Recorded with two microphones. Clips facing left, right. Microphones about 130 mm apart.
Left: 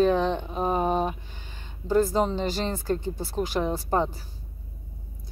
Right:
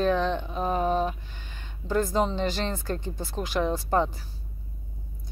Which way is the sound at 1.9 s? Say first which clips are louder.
Left 3 dB; 5° left (ahead or behind).